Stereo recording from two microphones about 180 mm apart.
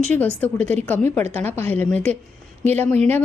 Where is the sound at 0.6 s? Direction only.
40° right (ahead or behind).